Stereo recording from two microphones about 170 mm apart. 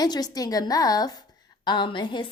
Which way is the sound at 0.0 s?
20° left (ahead or behind).